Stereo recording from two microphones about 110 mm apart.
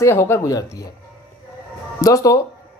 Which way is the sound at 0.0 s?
25° left (ahead or behind).